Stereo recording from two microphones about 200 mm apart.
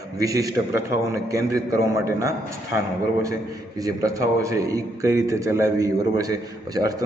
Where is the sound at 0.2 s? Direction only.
15° right (ahead or behind).